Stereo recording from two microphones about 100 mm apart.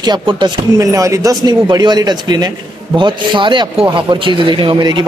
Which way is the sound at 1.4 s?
45° right (ahead or behind).